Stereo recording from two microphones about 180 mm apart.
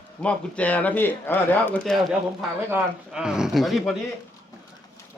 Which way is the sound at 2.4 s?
5° right (ahead or behind).